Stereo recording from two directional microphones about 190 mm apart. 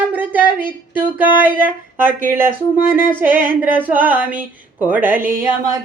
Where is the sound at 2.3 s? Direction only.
10° right (ahead or behind).